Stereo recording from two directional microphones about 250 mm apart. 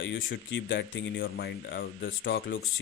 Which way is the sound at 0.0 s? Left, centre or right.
Left.